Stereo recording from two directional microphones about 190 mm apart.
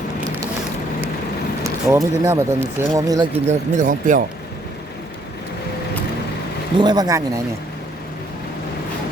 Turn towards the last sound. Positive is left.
turn(degrees=-15)  # may be behind; listen again after turning